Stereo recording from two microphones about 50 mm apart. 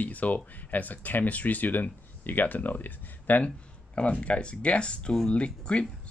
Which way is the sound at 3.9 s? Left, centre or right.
Left.